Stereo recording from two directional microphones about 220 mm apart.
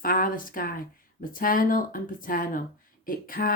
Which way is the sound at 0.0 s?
40° left (ahead or behind).